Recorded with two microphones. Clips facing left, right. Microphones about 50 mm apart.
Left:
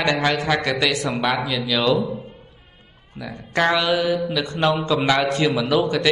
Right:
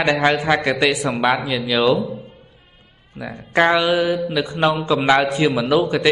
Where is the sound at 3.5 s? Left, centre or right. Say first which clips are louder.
Right 3 dB; centre.